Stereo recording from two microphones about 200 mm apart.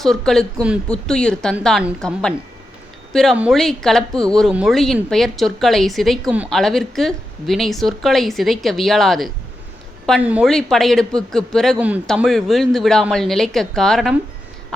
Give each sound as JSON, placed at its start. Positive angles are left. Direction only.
{"t": 0.0, "sound": "speech", "side_deg": 0}